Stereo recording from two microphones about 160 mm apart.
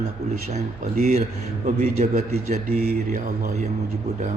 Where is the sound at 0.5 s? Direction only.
45° right (ahead or behind).